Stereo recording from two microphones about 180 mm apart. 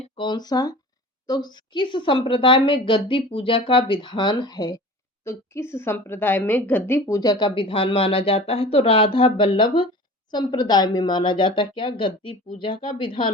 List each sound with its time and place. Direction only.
0.0 s a woman's voice: 25° left (ahead or behind)
7.0 s a woman's voice: 20° left (ahead or behind)